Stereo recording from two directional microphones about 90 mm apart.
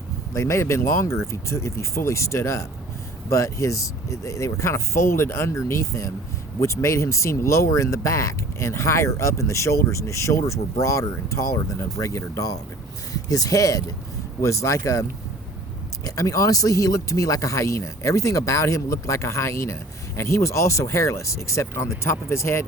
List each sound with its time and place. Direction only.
0.3 s speech: 30° left (ahead or behind)
16.0 s speech: 35° left (ahead or behind)